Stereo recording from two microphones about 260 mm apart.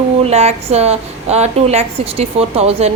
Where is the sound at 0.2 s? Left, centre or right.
Right.